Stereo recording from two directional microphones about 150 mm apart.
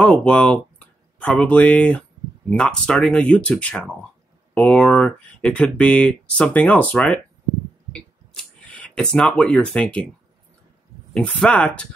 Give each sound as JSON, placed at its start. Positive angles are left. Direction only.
{"t": 0.0, "sound": "speech", "side_deg": 10}
{"t": 7.9, "sound": "a sound", "side_deg": 5}
{"t": 11.1, "sound": "speech", "side_deg": 5}